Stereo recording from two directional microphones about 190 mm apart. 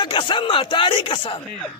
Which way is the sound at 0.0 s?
25° left (ahead or behind).